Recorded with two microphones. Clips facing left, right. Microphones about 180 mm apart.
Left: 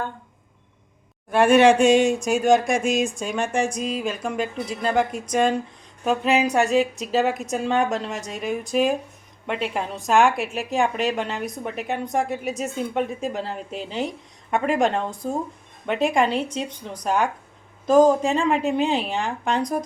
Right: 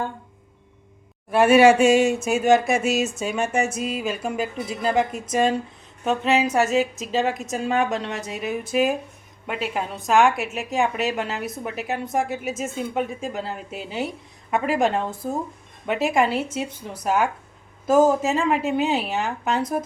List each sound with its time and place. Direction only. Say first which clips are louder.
1.3 s a woman's voice: right 1 dB; 5° right (ahead or behind)